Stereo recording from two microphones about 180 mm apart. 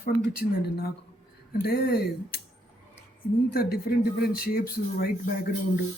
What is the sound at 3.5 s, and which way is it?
Speech, 55° left (ahead or behind).